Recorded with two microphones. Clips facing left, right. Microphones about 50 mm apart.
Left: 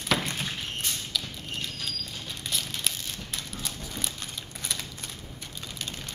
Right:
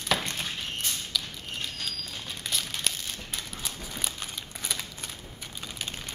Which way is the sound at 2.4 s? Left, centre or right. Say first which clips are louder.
Right 1 dB; centre.